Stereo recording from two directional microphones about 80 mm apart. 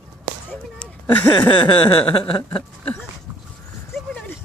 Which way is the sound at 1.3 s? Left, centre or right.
Left.